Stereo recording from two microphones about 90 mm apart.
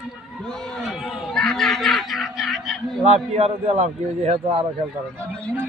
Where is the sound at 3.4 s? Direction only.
90° right.